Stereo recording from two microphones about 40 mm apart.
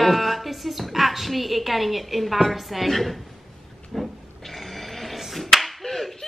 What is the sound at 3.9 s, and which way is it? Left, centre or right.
Finger snapping, centre.